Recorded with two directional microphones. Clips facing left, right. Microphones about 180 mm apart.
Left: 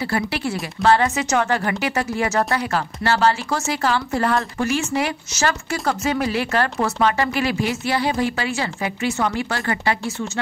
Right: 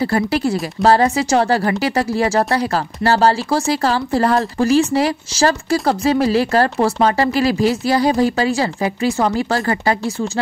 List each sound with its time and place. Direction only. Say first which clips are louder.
0.0 s a woman's voice: right 6 dB; 40° right (ahead or behind)